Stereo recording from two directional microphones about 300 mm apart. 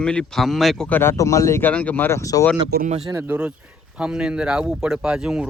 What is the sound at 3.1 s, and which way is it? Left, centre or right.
A man's voice, centre.